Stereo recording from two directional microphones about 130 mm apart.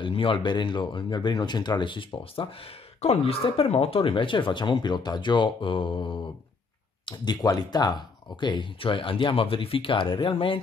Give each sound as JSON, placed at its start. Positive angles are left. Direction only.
{"t": 0.0, "sound": "speech", "side_deg": 40}